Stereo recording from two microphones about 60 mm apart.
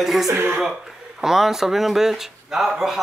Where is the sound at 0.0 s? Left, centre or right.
Centre.